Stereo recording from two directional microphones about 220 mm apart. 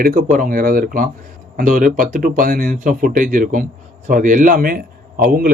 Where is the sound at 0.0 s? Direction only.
40° right (ahead or behind).